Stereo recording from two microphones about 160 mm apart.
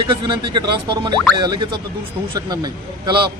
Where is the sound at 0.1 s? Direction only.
30° right (ahead or behind).